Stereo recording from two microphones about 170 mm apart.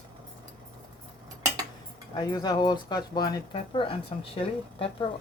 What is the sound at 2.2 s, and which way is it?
Speech, 25° left (ahead or behind).